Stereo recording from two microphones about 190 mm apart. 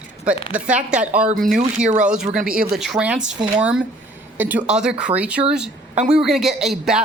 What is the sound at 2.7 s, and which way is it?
A man's voice, centre (ahead or behind).